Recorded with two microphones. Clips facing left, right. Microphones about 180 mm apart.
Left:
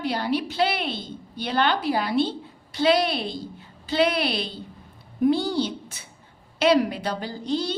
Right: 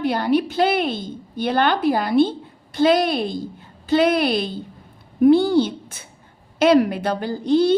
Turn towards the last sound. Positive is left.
turn(degrees=-55)  # may be behind; listen again after turning